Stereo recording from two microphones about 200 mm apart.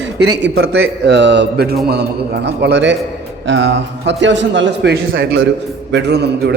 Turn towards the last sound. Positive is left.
turn(degrees=-55)  # may be behind; listen again after turning